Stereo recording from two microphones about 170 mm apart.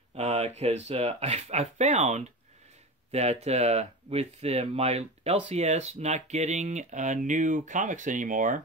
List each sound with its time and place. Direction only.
0.1 s speech: 40° right (ahead or behind)